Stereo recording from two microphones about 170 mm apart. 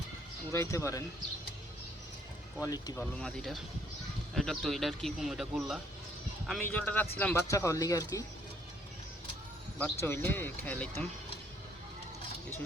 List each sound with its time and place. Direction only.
0.5 s a man's voice: 15° left (ahead or behind)
2.6 s speech: 25° left (ahead or behind)
2.9 s a man's voice: 5° left (ahead or behind)
9.7 s a man's voice: 10° left (ahead or behind)